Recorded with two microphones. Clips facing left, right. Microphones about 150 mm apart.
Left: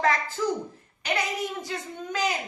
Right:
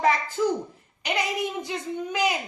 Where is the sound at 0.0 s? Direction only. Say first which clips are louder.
Right 2 dB; 15° right (ahead or behind).